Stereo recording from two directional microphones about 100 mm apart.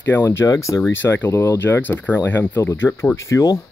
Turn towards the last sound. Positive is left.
turn(degrees=30)  # may be behind; listen again after turning